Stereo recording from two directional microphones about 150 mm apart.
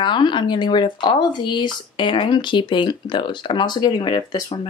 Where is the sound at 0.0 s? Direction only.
30° left (ahead or behind).